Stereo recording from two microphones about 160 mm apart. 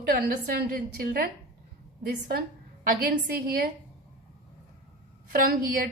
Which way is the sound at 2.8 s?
65° right (ahead or behind).